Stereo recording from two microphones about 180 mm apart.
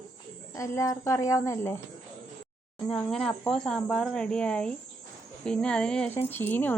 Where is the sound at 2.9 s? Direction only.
Centre (ahead or behind).